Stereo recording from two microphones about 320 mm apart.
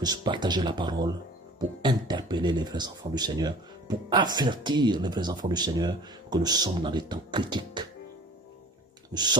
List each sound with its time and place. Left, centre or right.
0.0 s speech: centre
9.1 s speech: centre